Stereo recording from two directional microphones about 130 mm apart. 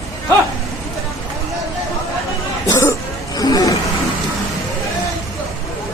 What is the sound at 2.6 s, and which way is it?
Speech, 25° left (ahead or behind).